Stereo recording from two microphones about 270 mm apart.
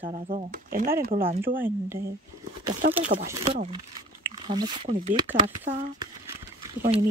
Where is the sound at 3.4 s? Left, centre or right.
Right.